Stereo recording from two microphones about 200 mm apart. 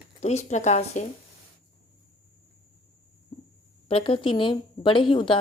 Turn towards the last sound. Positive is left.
turn(degrees=25)  # may be behind; listen again after turning